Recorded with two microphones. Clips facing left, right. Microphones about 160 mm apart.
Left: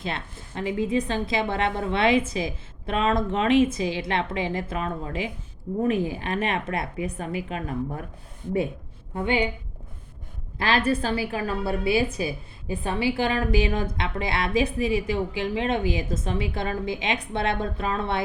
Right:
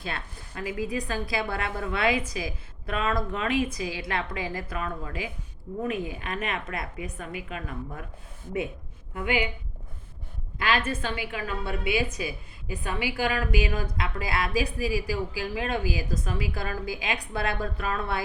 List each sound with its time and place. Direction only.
0.0 s a woman's voice: 25° left (ahead or behind)
9.1 s a woman's voice: 30° left (ahead or behind)
10.6 s a woman's voice: 30° left (ahead or behind)